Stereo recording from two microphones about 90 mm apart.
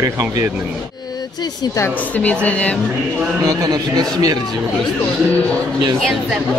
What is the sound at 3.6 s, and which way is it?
Speech, 45° right (ahead or behind).